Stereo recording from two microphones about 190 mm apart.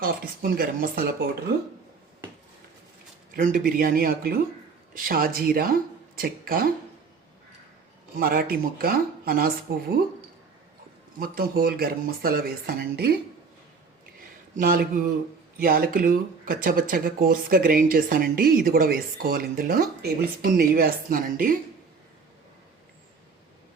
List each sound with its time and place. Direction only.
0.0 s speech: 50° right (ahead or behind)
3.3 s speech: 45° right (ahead or behind)
8.2 s speech: 55° right (ahead or behind)
11.2 s speech: 50° right (ahead or behind)
14.5 s speech: 50° right (ahead or behind)